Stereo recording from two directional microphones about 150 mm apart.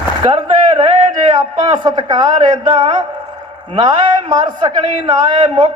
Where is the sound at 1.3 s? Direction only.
30° right (ahead or behind).